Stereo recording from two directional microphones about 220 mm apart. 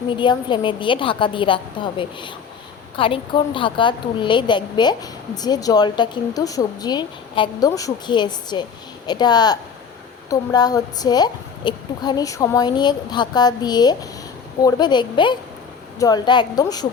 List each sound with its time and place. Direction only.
0.2 s a woman's voice: 20° left (ahead or behind)